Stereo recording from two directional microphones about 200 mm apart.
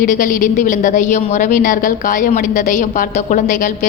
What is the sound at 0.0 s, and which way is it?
A woman's voice, 40° left (ahead or behind).